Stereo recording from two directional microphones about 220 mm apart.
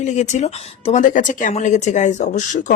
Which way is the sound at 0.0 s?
30° left (ahead or behind).